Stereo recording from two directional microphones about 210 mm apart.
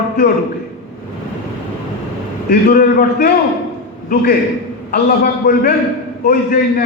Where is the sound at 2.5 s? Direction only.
45° left (ahead or behind).